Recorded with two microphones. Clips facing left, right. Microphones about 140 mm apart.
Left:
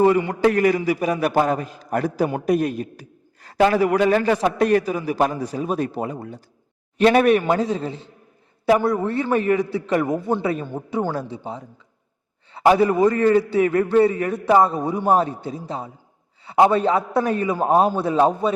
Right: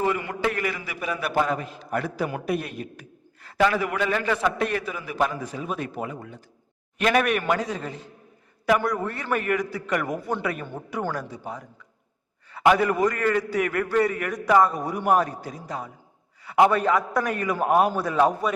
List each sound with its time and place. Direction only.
0.2 s a man's voice: 35° left (ahead or behind)